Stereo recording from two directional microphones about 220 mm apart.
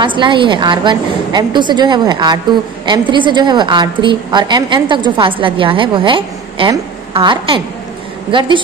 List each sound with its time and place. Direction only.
0.0 s a woman's voice: 20° right (ahead or behind)